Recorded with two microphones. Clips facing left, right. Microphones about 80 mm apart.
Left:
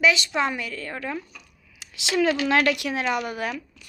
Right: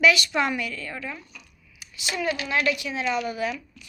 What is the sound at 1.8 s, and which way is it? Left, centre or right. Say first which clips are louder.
A woman's voice: left 6 dB; left.